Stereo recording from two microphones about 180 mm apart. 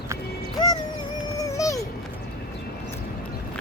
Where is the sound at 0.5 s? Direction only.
20° left (ahead or behind).